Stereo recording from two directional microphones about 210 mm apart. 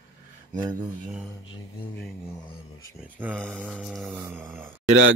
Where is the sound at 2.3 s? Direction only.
15° left (ahead or behind).